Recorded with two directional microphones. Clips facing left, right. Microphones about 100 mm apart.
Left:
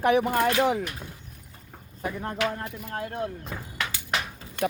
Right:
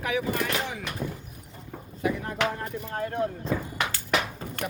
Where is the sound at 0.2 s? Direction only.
60° left (ahead or behind).